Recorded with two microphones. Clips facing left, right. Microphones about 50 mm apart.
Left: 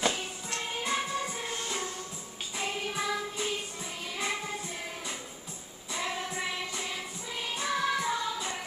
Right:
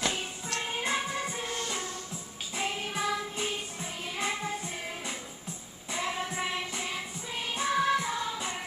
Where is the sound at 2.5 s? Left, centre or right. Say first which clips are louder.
Right 1 dB; centre.